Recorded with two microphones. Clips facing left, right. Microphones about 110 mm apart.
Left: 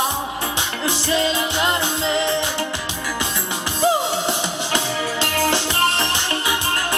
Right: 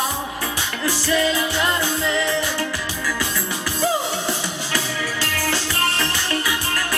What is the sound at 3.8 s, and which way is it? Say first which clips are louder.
Music: left 4 dB; 20° left (ahead or behind).